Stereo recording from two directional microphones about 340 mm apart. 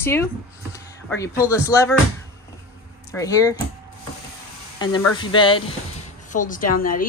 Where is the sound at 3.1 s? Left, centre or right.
Centre.